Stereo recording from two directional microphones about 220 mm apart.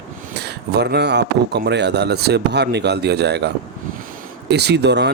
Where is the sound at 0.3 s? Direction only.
50° right (ahead or behind).